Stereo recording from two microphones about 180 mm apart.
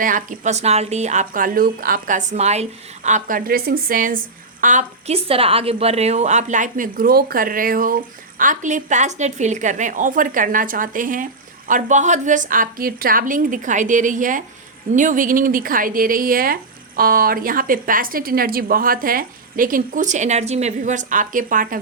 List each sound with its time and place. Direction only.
0.0 s speech: 45° right (ahead or behind)